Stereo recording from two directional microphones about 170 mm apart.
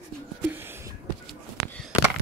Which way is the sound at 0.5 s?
15° right (ahead or behind).